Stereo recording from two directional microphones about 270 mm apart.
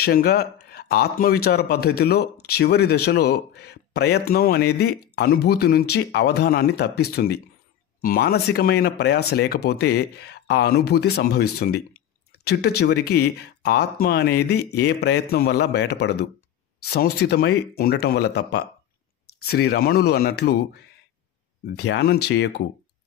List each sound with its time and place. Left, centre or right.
0.0 s speech: left
11.6 s drip: left
13.1 s speech: left